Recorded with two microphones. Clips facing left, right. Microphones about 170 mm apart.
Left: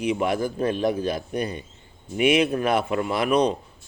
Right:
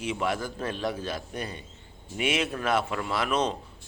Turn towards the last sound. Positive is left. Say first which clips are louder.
# left 6 dB
turn(degrees=15)  # may be behind; listen again after turning